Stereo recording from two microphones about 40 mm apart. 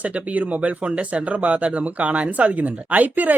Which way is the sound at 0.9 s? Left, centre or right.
Right.